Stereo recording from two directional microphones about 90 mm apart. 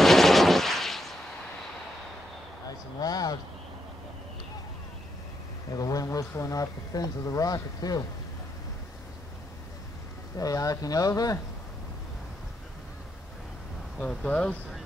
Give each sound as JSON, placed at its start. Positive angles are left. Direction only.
{"t": 0.0, "sound": "gunshot", "side_deg": 5}
{"t": 3.0, "sound": "a sound", "side_deg": 45}
{"t": 5.7, "sound": "speech", "side_deg": 40}
{"t": 10.3, "sound": "speech", "side_deg": 40}
{"t": 13.9, "sound": "speech", "side_deg": 10}